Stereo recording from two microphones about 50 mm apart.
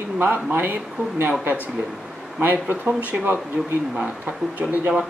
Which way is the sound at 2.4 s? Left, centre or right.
Right.